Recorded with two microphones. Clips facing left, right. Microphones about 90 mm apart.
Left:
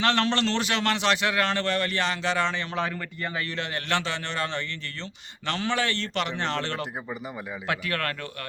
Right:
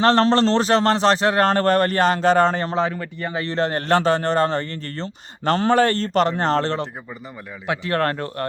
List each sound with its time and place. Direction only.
0.0 s a man's voice: 35° right (ahead or behind)
2.7 s a man's voice: 25° right (ahead or behind)
7.9 s a man's voice: 35° right (ahead or behind)